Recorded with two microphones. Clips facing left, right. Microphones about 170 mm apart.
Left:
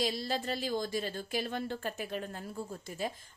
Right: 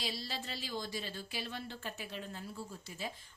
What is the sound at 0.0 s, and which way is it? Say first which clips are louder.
A woman's voice: left 9 dB; 50° left (ahead or behind).